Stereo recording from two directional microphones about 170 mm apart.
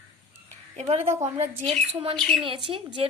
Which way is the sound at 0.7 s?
40° right (ahead or behind).